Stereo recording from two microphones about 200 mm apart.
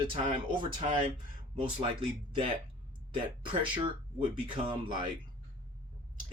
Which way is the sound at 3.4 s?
25° right (ahead or behind).